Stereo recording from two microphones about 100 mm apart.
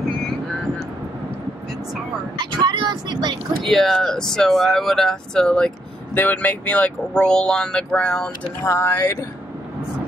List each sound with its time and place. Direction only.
2.6 s vehicle: 50° right (ahead or behind)
3.6 s speech: 5° left (ahead or behind)
6.1 s speech: 15° left (ahead or behind)
8.6 s speech: 25° left (ahead or behind)